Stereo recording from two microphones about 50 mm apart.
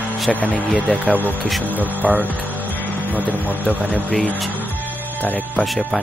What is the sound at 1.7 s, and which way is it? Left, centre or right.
Speech, right.